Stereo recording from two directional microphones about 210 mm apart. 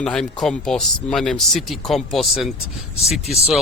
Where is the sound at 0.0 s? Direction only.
5° left (ahead or behind).